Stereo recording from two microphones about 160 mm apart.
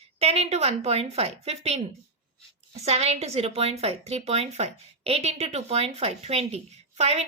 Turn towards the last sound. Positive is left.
turn(degrees=-40)  # may be behind; listen again after turning